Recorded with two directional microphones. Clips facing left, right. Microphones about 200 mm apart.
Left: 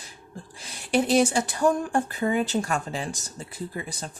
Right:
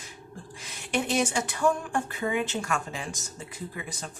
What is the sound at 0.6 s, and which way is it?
Speech, 35° left (ahead or behind).